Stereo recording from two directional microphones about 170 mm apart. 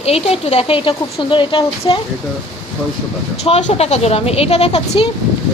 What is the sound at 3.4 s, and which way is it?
Speech, 40° left (ahead or behind).